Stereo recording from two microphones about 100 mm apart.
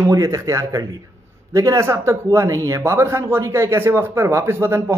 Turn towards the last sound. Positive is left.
turn(degrees=-25)  # may be behind; listen again after turning